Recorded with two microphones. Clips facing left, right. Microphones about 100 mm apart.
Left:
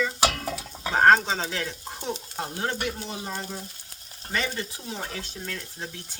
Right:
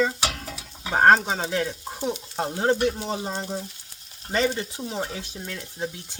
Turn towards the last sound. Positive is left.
turn(degrees=-15)  # may be behind; listen again after turning